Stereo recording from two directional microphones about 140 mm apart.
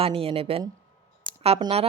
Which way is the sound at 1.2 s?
45° right (ahead or behind).